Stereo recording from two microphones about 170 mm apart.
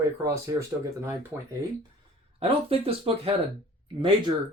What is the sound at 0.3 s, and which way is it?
Speech, 15° right (ahead or behind).